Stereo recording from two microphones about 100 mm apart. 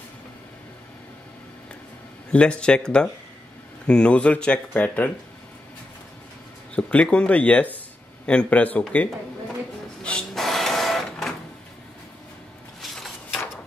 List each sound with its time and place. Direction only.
2.3 s speech: 10° left (ahead or behind)
6.7 s speech: 10° left (ahead or behind)
10.0 s printer: 5° left (ahead or behind)
12.8 s a sound: centre (ahead or behind)